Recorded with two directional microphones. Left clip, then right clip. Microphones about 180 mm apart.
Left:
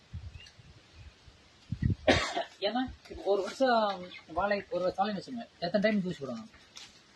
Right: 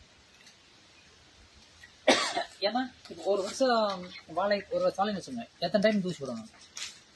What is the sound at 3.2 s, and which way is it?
Speech, 10° right (ahead or behind).